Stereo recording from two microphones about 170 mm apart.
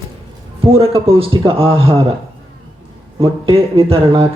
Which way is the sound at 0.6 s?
35° right (ahead or behind).